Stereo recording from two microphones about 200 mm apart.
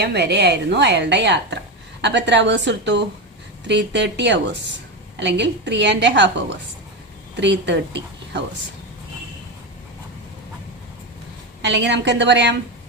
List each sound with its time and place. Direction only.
0.0 s a woman's voice: 55° right (ahead or behind)
7.3 s a woman's voice: 60° right (ahead or behind)
11.6 s a woman's voice: 60° right (ahead or behind)